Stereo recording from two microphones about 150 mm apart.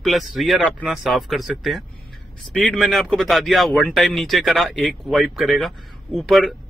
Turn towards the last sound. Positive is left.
turn(degrees=0)  # may be behind; listen again after turning